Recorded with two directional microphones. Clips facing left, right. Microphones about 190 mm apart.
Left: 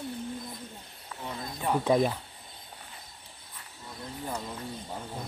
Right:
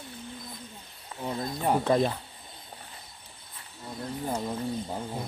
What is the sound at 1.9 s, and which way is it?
Speech, 10° left (ahead or behind).